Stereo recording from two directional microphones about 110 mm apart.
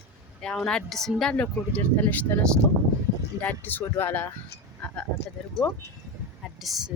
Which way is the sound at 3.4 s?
15° left (ahead or behind).